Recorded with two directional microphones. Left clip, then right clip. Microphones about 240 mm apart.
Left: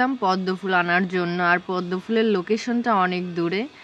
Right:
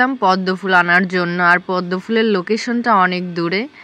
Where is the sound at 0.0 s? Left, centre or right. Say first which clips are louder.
Right 7 dB; centre.